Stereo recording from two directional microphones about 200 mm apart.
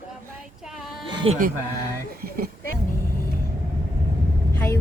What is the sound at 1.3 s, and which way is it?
Speech, 30° right (ahead or behind).